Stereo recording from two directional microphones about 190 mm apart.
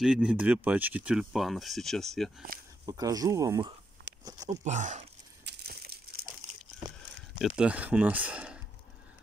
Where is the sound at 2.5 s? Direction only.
50° right (ahead or behind).